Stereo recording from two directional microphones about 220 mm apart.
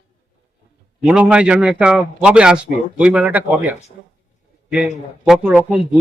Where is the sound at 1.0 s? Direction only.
5° right (ahead or behind).